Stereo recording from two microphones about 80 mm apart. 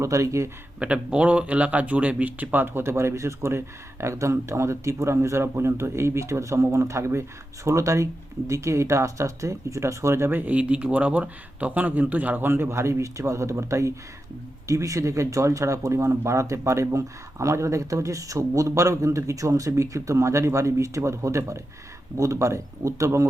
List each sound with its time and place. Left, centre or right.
0.0 s speech: right
0.8 s speech: centre; by 23.2 s right